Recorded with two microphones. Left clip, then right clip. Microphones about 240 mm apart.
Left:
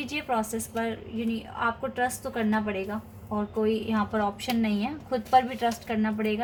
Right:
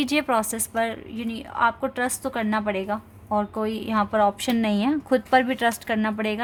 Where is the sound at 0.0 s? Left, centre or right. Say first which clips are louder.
Right 6 dB; right.